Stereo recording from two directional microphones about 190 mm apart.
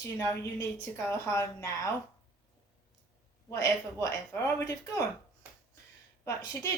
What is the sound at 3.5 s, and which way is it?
Speech, 15° left (ahead or behind).